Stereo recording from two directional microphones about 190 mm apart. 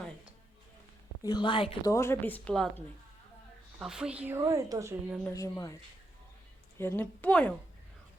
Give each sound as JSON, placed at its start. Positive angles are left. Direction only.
{"t": 1.2, "sound": "a woman's voice", "side_deg": 20}
{"t": 5.2, "sound": "a woman's voice", "side_deg": 15}
{"t": 6.7, "sound": "a woman's voice", "side_deg": 10}